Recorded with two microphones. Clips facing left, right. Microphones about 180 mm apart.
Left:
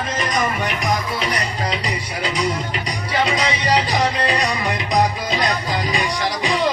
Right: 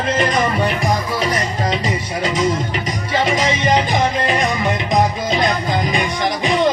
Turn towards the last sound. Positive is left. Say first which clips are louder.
# right 3 dB
turn(degrees=-20)  # may be behind; listen again after turning